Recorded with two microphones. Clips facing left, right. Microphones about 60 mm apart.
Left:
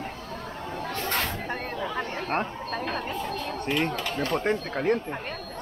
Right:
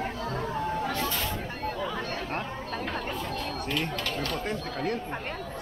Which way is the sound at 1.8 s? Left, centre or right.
Left.